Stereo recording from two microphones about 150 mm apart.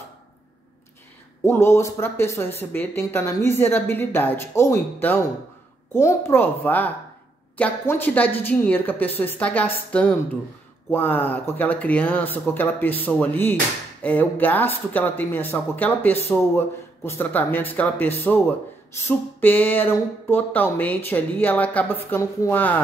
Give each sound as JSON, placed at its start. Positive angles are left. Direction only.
{"t": 1.4, "sound": "speech", "side_deg": 15}